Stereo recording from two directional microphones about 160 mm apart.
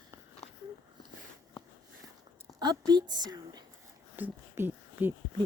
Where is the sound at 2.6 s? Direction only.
25° right (ahead or behind).